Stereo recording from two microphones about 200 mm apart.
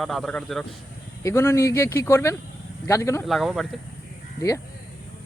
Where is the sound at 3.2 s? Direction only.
Centre (ahead or behind).